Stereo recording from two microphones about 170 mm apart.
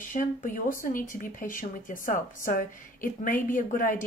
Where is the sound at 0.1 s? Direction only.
50° left (ahead or behind).